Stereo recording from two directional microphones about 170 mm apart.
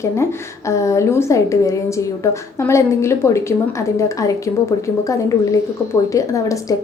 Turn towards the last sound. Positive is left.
turn(degrees=20)  # may be behind; listen again after turning